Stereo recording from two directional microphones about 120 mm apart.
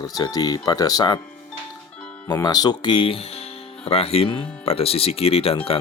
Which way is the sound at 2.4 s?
35° left (ahead or behind).